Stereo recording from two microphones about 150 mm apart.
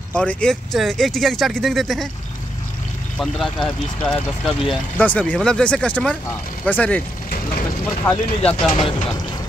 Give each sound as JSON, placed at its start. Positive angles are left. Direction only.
{"t": 0.1, "sound": "speech", "side_deg": 5}
{"t": 3.2, "sound": "speech", "side_deg": 5}
{"t": 8.7, "sound": "speech", "side_deg": 35}